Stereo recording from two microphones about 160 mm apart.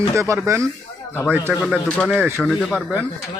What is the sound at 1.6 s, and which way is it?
Speech, 5° left (ahead or behind).